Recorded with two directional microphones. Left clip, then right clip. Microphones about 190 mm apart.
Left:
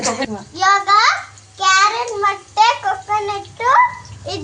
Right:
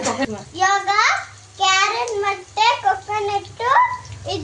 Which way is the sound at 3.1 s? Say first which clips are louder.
Left 2 dB; 5° left (ahead or behind).